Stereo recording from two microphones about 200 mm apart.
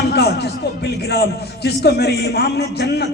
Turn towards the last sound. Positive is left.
turn(degrees=55)  # may be behind; listen again after turning